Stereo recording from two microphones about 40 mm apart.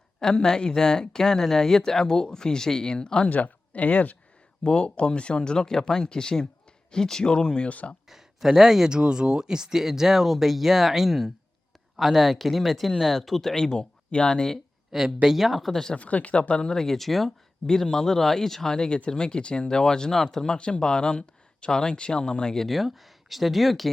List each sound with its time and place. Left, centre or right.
0.2 s speech: centre
3.2 s speech: left
4.6 s speech: left
7.7 s speech: left
8.1 s speech: centre
8.9 s speech: right; by 14.5 s centre
14.9 s speech: centre
15.7 s speech: centre
16.0 s speech: left
16.7 s speech: centre
17.7 s speech: centre
22.6 s speech: centre